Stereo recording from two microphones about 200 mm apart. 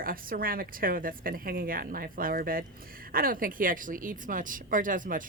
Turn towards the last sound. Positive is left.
turn(degrees=-40)  # may be behind; listen again after turning